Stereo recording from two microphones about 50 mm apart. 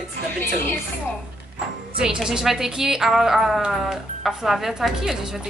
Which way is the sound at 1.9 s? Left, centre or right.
Centre.